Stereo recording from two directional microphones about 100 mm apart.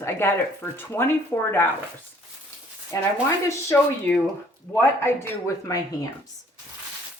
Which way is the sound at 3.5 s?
30° left (ahead or behind).